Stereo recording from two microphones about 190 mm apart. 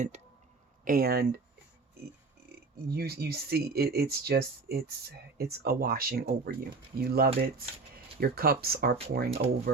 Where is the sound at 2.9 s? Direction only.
55° right (ahead or behind).